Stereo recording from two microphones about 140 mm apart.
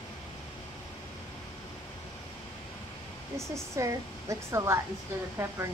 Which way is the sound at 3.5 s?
20° right (ahead or behind).